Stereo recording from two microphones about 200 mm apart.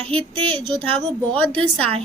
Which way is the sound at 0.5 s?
25° right (ahead or behind).